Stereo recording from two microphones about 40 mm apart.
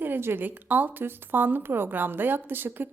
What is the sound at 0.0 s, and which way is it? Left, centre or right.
Speech, right.